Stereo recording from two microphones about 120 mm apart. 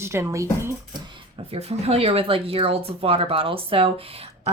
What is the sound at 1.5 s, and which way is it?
Speech, 60° right (ahead or behind).